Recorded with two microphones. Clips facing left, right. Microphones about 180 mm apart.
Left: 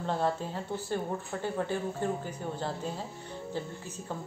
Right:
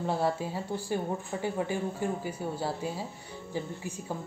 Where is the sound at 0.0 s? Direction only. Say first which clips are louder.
Right 1 dB; 10° right (ahead or behind).